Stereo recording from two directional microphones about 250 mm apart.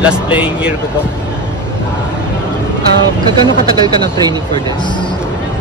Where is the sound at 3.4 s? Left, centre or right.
Centre.